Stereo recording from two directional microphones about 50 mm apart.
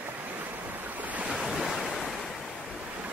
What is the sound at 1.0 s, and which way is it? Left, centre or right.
Waves, right.